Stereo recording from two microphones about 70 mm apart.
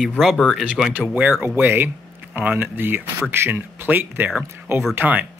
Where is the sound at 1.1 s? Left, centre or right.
Right.